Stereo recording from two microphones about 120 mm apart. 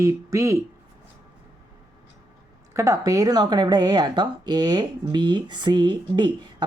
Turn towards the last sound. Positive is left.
turn(degrees=-40)  # may be behind; listen again after turning